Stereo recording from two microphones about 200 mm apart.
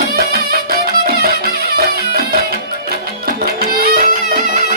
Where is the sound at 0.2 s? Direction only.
50° right (ahead or behind).